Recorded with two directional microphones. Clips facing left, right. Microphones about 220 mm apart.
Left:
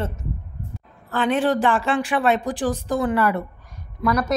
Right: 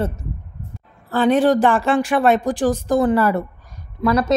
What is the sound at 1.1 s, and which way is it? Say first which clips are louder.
A woman's voice: right 5 dB; 40° right (ahead or behind).